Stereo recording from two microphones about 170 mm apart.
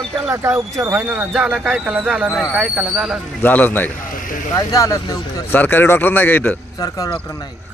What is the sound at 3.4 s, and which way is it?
Speech, 10° left (ahead or behind).